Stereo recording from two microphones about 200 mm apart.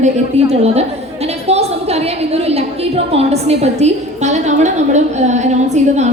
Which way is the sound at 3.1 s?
30° right (ahead or behind).